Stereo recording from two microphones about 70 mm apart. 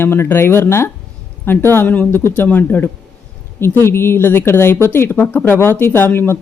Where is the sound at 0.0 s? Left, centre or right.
Left.